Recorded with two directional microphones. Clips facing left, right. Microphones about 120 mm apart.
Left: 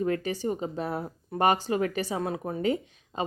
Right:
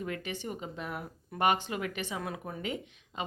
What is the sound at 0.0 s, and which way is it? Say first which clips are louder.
Speech: left 9 dB; 35° left (ahead or behind).